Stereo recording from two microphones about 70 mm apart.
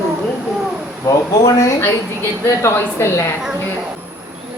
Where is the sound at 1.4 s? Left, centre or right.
Left.